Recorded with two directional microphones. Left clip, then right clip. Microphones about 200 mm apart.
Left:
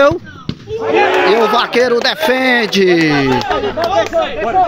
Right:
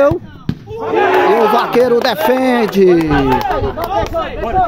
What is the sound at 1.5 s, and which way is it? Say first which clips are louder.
Speech: right 1 dB; 5° right (ahead or behind).